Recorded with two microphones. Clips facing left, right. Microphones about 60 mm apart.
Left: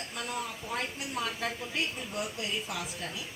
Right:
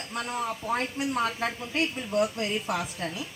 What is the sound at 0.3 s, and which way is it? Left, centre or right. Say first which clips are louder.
A woman's voice: right 7 dB; right.